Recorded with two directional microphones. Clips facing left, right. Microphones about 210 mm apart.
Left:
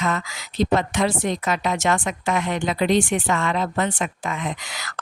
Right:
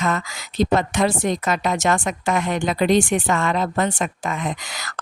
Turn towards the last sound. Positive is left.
turn(degrees=-45)  # may be behind; listen again after turning